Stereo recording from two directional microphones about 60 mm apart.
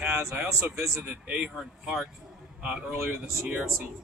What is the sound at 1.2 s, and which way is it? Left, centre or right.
Speech, centre.